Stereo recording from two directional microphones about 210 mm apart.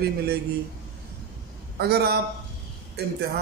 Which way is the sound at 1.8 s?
50° right (ahead or behind).